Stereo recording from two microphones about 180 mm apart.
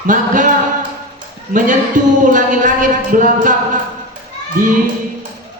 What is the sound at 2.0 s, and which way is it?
Speech, 45° right (ahead or behind).